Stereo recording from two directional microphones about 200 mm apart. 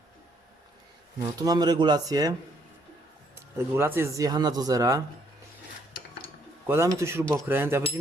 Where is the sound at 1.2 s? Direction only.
20° right (ahead or behind).